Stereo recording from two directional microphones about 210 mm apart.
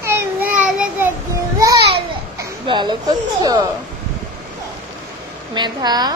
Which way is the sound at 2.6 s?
20° right (ahead or behind).